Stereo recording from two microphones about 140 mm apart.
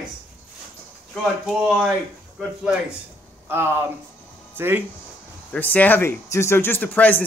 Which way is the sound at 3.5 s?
15° right (ahead or behind).